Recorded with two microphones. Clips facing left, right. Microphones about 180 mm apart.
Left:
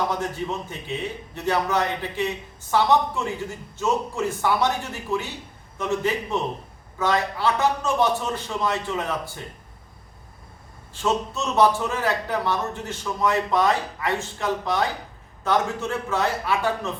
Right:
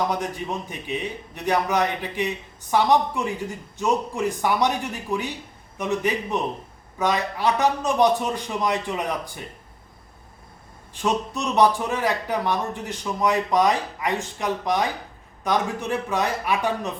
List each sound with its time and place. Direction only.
0.1 s a man's voice: 15° right (ahead or behind)
11.0 s a man's voice: 15° right (ahead or behind)